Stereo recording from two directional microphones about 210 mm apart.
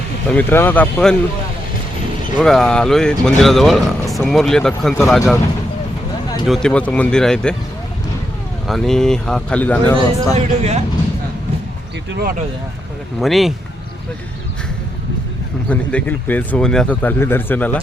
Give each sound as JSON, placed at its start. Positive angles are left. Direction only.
{"t": 0.3, "sound": "speech", "side_deg": 10}
{"t": 2.4, "sound": "speech", "side_deg": 0}
{"t": 6.5, "sound": "speech", "side_deg": 5}
{"t": 8.6, "sound": "speech", "side_deg": 0}
{"t": 10.3, "sound": "speech", "side_deg": -30}
{"t": 12.1, "sound": "speech", "side_deg": -45}
{"t": 13.1, "sound": "speech", "side_deg": 0}
{"t": 15.7, "sound": "speech", "side_deg": 5}